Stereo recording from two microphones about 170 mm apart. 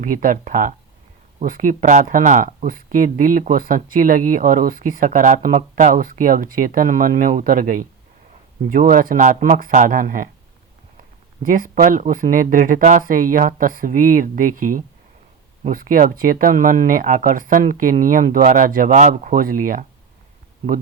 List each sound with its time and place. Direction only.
0.0 s speech: 55° right (ahead or behind)
11.4 s speech: 55° right (ahead or behind)
18.9 s speech: 45° right (ahead or behind)